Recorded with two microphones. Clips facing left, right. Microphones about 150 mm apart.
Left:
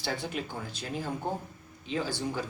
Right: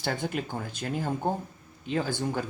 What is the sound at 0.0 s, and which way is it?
Speech, 50° right (ahead or behind).